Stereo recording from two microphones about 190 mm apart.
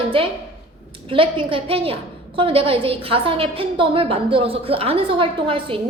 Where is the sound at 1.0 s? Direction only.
25° right (ahead or behind).